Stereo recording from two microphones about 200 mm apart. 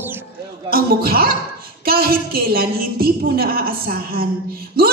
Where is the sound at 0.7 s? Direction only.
50° right (ahead or behind).